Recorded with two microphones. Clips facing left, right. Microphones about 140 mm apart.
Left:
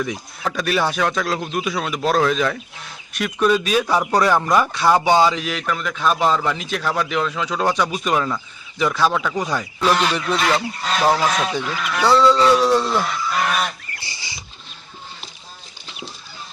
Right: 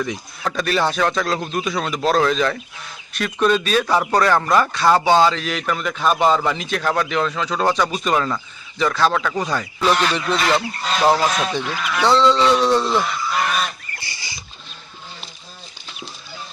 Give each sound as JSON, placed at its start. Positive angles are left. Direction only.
{"t": 0.0, "sound": "a man's voice", "side_deg": 5}
{"t": 5.5, "sound": "a man's voice", "side_deg": 0}